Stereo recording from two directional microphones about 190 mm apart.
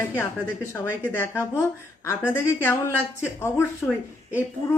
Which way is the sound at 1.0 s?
10° left (ahead or behind).